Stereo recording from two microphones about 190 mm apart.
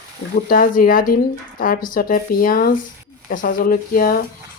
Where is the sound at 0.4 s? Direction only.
45° left (ahead or behind).